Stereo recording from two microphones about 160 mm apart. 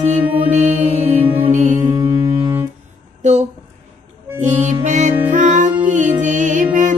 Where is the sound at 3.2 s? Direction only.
45° right (ahead or behind).